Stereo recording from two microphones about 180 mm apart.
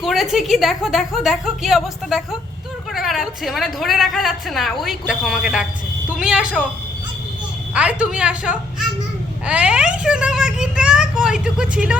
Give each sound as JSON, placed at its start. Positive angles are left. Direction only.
{"t": 0.0, "sound": "a woman's voice", "side_deg": 0}
{"t": 7.7, "sound": "a woman's voice", "side_deg": -5}